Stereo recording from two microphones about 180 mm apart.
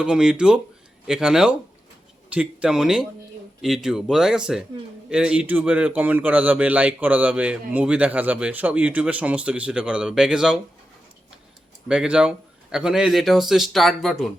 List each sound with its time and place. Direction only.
0.0 s a man's voice: 5° right (ahead or behind)
11.9 s a man's voice: 5° right (ahead or behind)